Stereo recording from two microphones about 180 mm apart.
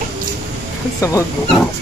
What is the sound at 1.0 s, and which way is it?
Speech, 15° left (ahead or behind).